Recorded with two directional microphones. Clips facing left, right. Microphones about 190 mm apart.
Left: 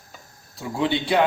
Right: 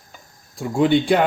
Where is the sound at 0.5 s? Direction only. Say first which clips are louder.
Right 7 dB; 50° right (ahead or behind).